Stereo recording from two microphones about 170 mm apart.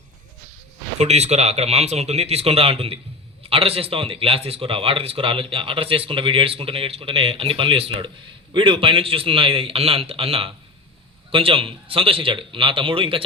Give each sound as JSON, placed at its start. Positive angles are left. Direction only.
{"t": 0.9, "sound": "speech", "side_deg": -40}